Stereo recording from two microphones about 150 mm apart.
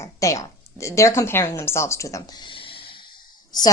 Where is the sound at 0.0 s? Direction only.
20° left (ahead or behind).